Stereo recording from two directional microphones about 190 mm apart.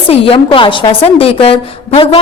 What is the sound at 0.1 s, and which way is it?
A woman's voice, 30° left (ahead or behind).